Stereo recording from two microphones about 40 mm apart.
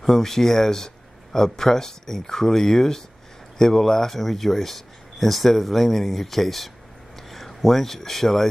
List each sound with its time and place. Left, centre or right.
0.0 s speech: centre